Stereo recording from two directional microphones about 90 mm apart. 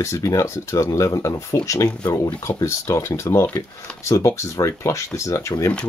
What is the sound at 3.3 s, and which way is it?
Speech, 45° left (ahead or behind).